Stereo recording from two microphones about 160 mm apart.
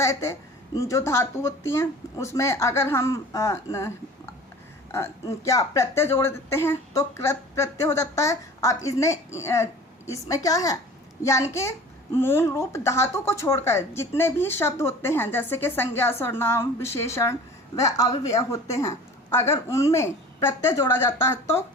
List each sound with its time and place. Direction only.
0.0 s a woman's voice: 20° left (ahead or behind)